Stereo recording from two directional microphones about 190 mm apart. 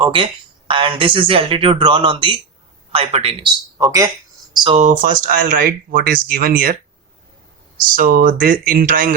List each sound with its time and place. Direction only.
0.0 s speech: 25° right (ahead or behind)
3.8 s speech: 15° right (ahead or behind)
4.8 s speech: 45° right (ahead or behind)
7.9 s speech: 50° right (ahead or behind)